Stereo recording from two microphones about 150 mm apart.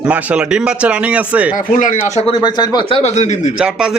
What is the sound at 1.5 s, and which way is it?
Speech, 60° left (ahead or behind).